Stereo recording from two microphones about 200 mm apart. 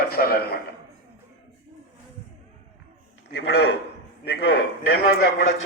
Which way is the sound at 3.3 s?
55° left (ahead or behind).